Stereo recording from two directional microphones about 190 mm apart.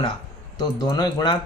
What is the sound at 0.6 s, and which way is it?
Speech, 20° left (ahead or behind).